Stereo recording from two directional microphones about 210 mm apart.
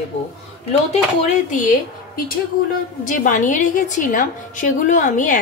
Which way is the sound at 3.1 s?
35° left (ahead or behind).